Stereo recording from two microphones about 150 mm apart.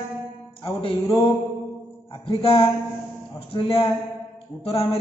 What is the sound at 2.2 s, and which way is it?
A man's voice, 35° left (ahead or behind).